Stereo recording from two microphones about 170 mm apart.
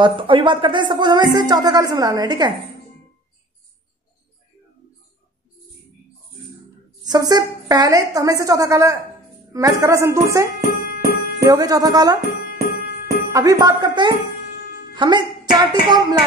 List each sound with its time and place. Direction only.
0.0 s speech: 30° right (ahead or behind)
7.1 s speech: 25° right (ahead or behind)
10.8 s music: 60° left (ahead or behind)
11.4 s speech: 20° right (ahead or behind)
12.4 s music: 60° left (ahead or behind)
13.3 s speech: 20° right (ahead or behind)